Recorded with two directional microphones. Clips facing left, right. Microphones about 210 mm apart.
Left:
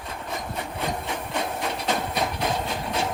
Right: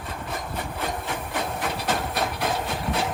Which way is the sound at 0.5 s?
Centre (ahead or behind).